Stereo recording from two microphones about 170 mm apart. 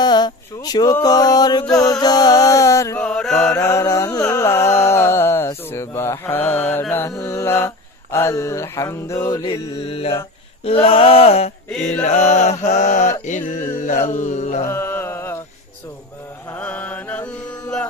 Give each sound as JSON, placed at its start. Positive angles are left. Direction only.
{"t": 0.0, "sound": "speech", "side_deg": 25}
{"t": 0.9, "sound": "music", "side_deg": 20}
{"t": 3.0, "sound": "mantra", "side_deg": 5}
{"t": 3.5, "sound": "music", "side_deg": 15}
{"t": 11.7, "sound": "mantra", "side_deg": 5}
{"t": 12.0, "sound": "mantra", "side_deg": 40}
{"t": 14.6, "sound": "mantra", "side_deg": 15}
{"t": 16.5, "sound": "mantra", "side_deg": 10}